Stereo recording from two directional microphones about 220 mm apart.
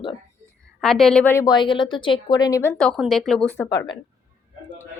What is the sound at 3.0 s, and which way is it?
Speech, centre (ahead or behind).